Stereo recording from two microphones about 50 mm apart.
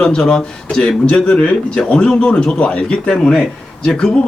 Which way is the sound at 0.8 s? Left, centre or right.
Left.